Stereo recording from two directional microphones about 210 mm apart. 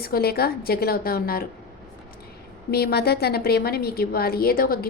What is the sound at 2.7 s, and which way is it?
A woman's voice, 50° left (ahead or behind).